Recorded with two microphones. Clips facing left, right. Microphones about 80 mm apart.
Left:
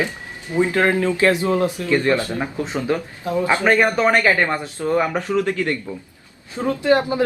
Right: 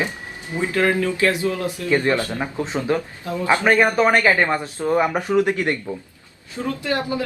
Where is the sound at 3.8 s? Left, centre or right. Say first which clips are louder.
Even; centre.